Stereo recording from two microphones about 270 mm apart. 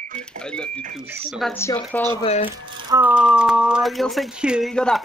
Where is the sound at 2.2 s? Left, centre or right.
Left.